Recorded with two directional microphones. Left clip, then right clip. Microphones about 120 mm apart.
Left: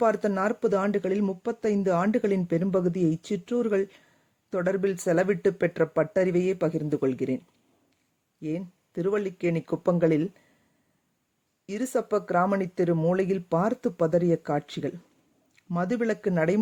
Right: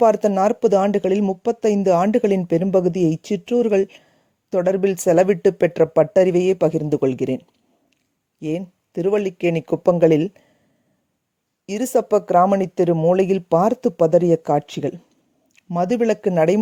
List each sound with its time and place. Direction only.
0.0 s speech: 50° right (ahead or behind)
11.6 s speech: 50° right (ahead or behind)